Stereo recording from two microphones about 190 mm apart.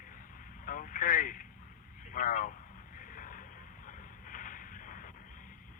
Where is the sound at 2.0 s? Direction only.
45° left (ahead or behind).